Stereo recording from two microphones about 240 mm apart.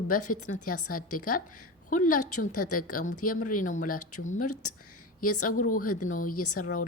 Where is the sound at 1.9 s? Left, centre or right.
Left.